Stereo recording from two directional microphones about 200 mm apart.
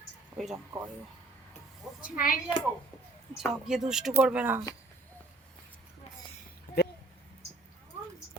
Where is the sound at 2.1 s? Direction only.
45° left (ahead or behind).